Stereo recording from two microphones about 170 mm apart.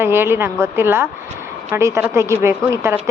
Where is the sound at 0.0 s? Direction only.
15° right (ahead or behind).